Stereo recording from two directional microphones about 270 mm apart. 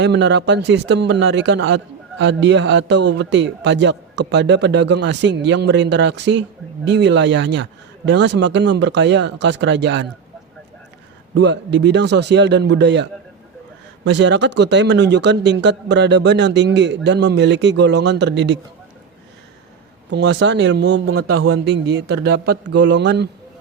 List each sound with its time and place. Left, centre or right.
0.0 s a man's voice: right
11.3 s a man's voice: right
20.1 s a man's voice: right